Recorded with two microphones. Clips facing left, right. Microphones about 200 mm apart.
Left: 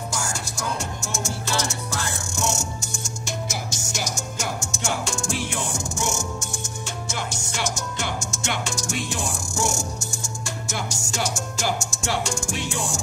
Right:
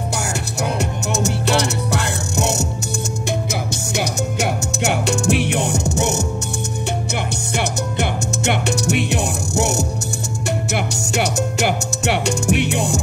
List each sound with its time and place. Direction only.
0.1 s music: 65° right (ahead or behind)